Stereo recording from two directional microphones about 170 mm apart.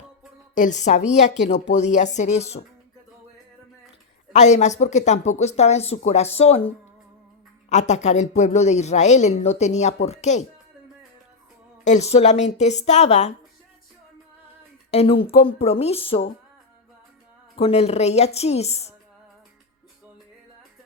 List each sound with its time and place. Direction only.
0.5 s speech: 45° left (ahead or behind)
4.3 s a woman's voice: 45° left (ahead or behind)
7.7 s speech: 40° left (ahead or behind)
11.9 s a woman's voice: 40° left (ahead or behind)
14.8 s a woman's voice: 35° left (ahead or behind)
17.6 s a woman's voice: 35° left (ahead or behind)